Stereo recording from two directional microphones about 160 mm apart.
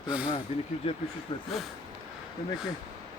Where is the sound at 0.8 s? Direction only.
35° left (ahead or behind).